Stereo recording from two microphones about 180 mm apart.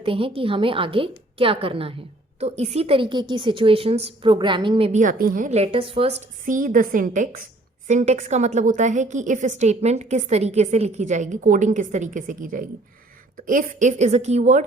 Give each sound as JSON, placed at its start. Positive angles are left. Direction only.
{"t": 0.0, "sound": "a woman's voice", "side_deg": -30}
{"t": 4.9, "sound": "a woman's voice", "side_deg": -45}
{"t": 6.4, "sound": "a woman's voice", "side_deg": -50}